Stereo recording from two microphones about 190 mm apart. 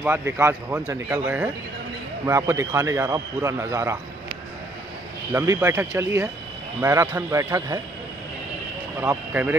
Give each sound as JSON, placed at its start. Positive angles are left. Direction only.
{"t": 0.0, "sound": "a man's voice", "side_deg": -10}
{"t": 5.3, "sound": "a man's voice", "side_deg": -15}
{"t": 9.0, "sound": "a man's voice", "side_deg": -10}